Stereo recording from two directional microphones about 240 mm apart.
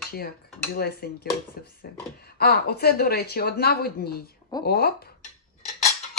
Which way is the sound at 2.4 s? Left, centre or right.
Left.